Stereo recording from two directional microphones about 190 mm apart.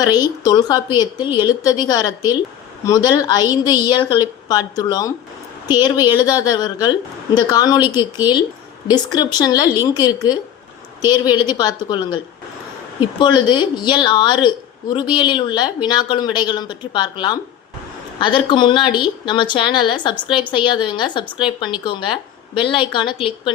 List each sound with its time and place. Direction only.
0.2 s a woman's voice: 20° left (ahead or behind)
1.2 s a woman's voice: 10° right (ahead or behind)
1.6 s a woman's voice: 20° left (ahead or behind)
8.9 s a woman's voice: 20° left (ahead or behind)